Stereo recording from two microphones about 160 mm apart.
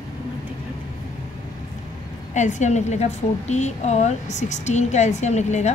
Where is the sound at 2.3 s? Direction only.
50° left (ahead or behind).